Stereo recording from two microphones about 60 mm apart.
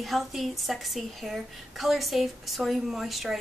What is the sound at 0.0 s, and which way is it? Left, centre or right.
A woman's voice, centre.